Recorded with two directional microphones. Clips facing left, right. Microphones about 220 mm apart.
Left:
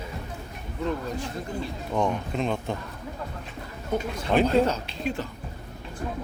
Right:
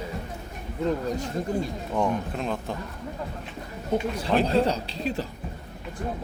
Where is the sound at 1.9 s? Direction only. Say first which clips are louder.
Even; 5° right (ahead or behind).